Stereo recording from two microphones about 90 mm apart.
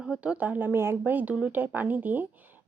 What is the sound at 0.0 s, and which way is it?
Speech, 10° right (ahead or behind).